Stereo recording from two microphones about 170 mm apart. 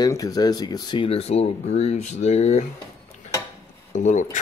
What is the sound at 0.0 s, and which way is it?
Speech, 20° left (ahead or behind).